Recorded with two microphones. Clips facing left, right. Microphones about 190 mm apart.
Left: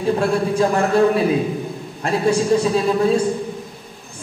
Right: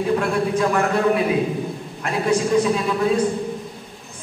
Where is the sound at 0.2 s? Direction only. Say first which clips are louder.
Left 2 dB; 30° left (ahead or behind).